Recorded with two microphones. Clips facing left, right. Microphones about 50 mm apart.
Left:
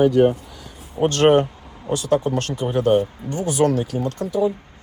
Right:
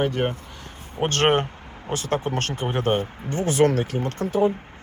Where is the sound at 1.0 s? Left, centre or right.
Right.